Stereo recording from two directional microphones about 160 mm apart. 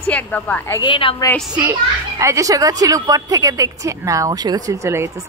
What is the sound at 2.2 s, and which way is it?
A woman's voice, 20° right (ahead or behind).